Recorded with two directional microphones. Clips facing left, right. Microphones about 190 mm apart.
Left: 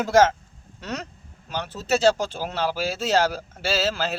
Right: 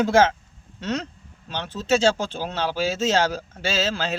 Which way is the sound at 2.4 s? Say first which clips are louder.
Right 2 dB; 5° left (ahead or behind).